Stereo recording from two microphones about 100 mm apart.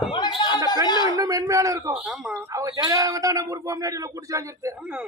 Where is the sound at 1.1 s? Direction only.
35° right (ahead or behind).